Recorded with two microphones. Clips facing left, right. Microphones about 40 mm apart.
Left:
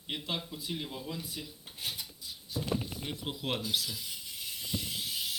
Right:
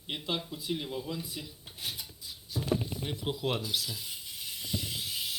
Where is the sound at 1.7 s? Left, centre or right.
Left.